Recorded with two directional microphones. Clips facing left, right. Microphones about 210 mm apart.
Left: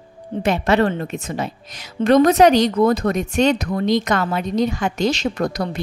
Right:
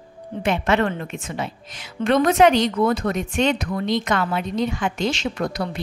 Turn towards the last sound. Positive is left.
turn(degrees=40)  # may be behind; listen again after turning